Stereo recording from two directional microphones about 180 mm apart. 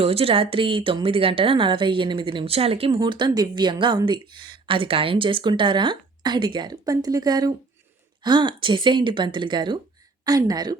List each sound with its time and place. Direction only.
0.0 s a woman's voice: 35° right (ahead or behind)